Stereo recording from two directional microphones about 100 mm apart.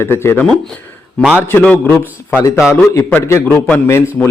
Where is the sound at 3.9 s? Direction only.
25° left (ahead or behind).